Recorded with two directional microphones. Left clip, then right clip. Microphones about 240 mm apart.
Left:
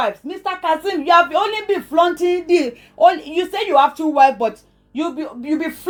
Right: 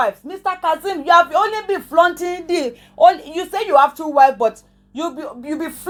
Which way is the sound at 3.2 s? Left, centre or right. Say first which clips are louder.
Left 2 dB; right.